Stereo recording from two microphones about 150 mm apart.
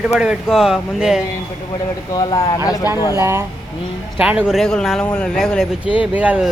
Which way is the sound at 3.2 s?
20° right (ahead or behind).